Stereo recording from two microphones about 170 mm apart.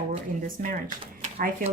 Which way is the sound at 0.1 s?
55° right (ahead or behind).